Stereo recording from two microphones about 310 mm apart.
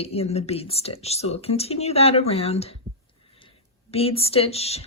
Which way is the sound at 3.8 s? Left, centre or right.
Centre.